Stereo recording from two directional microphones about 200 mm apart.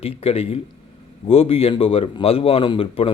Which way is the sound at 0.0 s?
30° left (ahead or behind).